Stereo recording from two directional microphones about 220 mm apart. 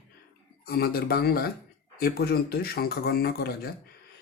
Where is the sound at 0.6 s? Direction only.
45° left (ahead or behind).